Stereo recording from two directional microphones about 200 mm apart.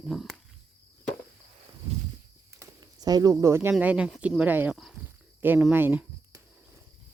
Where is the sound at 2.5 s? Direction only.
15° right (ahead or behind).